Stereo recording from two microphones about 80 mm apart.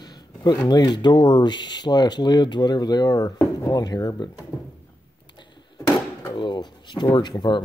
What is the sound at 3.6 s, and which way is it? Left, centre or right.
Speech, left.